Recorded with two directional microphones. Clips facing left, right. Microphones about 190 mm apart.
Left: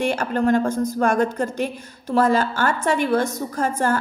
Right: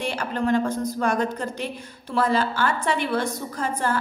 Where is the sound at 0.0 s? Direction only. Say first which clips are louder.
Left 5 dB; 50° left (ahead or behind).